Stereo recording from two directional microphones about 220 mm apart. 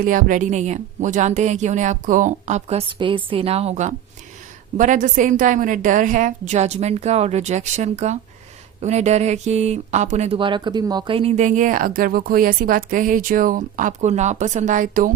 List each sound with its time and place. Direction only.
0.0 s speech: 40° right (ahead or behind)